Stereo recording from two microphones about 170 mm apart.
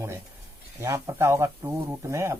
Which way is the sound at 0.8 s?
15° right (ahead or behind).